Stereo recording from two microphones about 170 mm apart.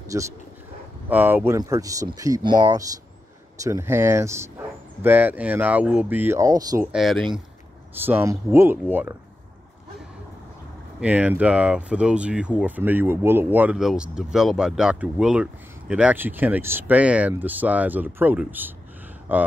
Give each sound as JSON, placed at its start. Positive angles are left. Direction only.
{"t": 0.1, "sound": "speech", "side_deg": -20}
{"t": 6.9, "sound": "speech", "side_deg": 0}
{"t": 8.0, "sound": "speech", "side_deg": -15}
{"t": 11.0, "sound": "speech", "side_deg": -10}